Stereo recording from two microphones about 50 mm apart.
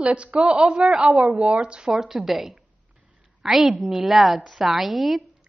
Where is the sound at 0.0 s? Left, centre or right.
Right.